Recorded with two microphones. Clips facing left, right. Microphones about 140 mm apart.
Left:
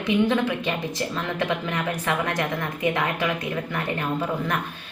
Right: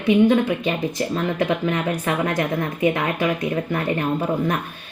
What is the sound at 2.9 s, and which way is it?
Speech, 45° right (ahead or behind).